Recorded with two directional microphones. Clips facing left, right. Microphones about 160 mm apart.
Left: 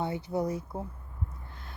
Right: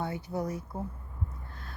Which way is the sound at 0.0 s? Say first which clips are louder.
Left 3 dB; 25° left (ahead or behind).